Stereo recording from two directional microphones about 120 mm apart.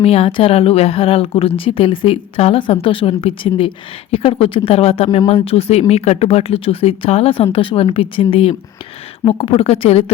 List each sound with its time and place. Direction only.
0.0 s speech: 55° left (ahead or behind)